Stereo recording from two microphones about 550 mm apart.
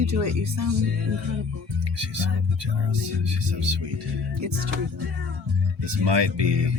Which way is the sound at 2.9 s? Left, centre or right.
Right.